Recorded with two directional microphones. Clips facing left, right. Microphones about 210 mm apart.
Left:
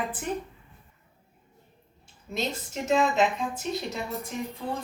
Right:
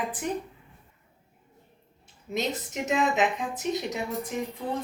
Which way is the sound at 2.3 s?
15° right (ahead or behind).